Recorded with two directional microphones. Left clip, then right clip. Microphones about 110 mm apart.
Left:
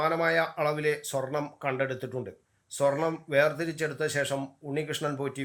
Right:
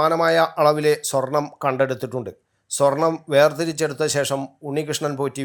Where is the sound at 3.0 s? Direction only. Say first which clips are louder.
Right 9 dB; 25° right (ahead or behind).